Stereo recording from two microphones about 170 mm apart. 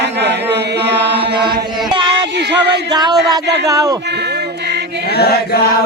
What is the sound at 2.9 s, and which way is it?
Speech, 25° right (ahead or behind).